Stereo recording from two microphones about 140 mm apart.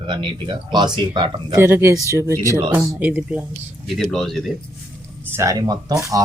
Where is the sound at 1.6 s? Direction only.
15° right (ahead or behind).